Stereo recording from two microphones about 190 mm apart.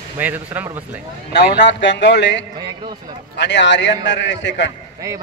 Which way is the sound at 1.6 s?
70° left (ahead or behind).